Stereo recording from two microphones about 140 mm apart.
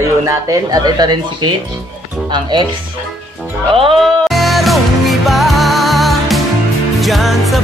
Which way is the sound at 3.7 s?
40° right (ahead or behind).